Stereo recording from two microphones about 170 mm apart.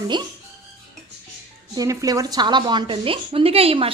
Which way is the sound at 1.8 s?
20° right (ahead or behind).